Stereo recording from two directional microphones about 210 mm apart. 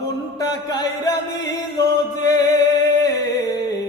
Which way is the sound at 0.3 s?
20° left (ahead or behind).